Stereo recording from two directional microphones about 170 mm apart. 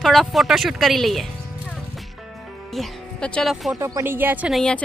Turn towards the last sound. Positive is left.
turn(degrees=5)  # may be behind; listen again after turning